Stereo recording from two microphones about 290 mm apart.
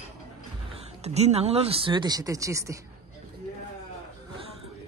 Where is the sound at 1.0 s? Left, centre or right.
Right.